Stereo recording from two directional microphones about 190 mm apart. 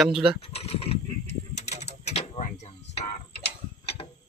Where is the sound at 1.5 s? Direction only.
35° left (ahead or behind).